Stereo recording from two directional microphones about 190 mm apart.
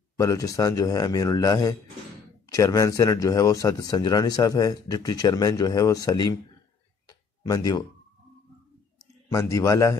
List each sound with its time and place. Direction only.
0.2 s a man's voice: 15° left (ahead or behind)
7.1 s tick-tock: 20° left (ahead or behind)
9.3 s a man's voice: 15° left (ahead or behind)